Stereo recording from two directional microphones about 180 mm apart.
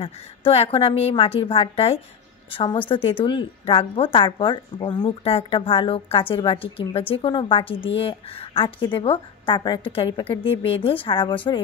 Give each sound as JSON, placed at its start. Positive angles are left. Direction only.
{"t": 0.0, "sound": "a woman's voice", "side_deg": 30}